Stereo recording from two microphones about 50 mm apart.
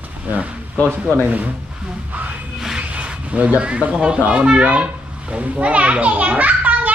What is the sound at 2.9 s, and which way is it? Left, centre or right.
A child's voice, right.